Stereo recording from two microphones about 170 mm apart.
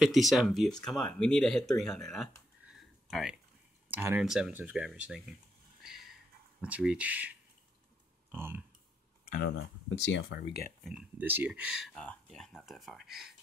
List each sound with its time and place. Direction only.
0.0 s speech: centre (ahead or behind)
3.9 s speech: 15° right (ahead or behind)
5.8 s a sound: centre (ahead or behind)
6.6 s speech: 5° right (ahead or behind)
9.2 s a sound: 55° left (ahead or behind)
9.6 s speech: 90° left
10.8 s speech: 5° right (ahead or behind)